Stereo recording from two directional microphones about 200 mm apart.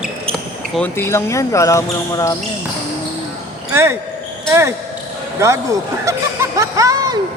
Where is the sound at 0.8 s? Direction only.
10° left (ahead or behind).